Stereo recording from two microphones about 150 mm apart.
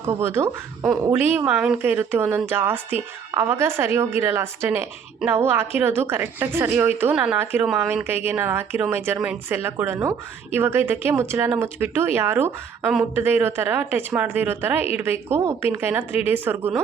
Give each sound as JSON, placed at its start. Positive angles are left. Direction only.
{"t": 0.0, "sound": "a woman's voice", "side_deg": -15}